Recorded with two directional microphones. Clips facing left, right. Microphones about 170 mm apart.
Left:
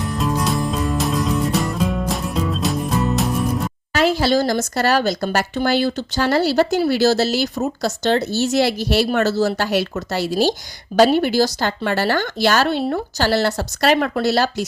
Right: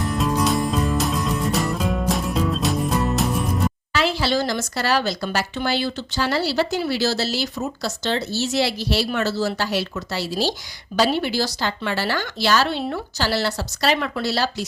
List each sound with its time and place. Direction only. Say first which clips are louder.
0.2 s music: even; centre (ahead or behind)
3.9 s speech: left 6 dB; 45° left (ahead or behind)